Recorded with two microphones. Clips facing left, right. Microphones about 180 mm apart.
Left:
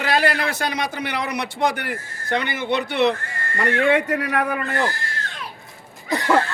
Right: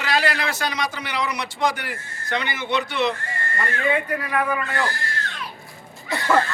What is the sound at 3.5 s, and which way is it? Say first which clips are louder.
Speech: left 5 dB; 85° left.